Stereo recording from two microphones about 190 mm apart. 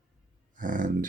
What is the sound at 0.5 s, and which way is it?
Speech, 45° right (ahead or behind).